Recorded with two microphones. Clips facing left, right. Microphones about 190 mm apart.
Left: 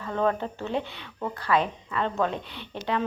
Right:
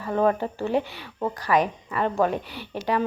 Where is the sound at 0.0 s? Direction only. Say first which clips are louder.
Right 4 dB; 10° right (ahead or behind).